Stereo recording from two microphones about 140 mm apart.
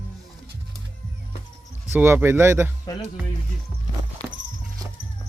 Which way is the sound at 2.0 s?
15° right (ahead or behind).